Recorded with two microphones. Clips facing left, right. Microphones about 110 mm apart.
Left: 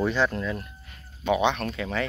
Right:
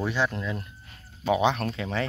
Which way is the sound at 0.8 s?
30° right (ahead or behind).